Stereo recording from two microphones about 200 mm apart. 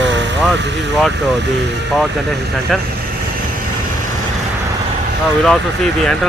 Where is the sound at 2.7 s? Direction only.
Centre (ahead or behind).